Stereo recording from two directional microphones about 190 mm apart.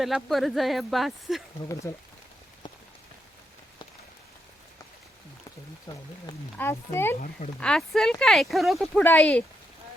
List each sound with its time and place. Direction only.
0.0 s speech: centre (ahead or behind)
5.9 s speech: 20° left (ahead or behind); by 9.4 s 5° left (ahead or behind)